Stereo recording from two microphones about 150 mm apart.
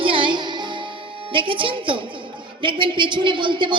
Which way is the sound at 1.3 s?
35° right (ahead or behind).